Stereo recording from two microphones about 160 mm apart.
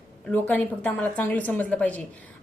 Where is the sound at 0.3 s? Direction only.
10° left (ahead or behind).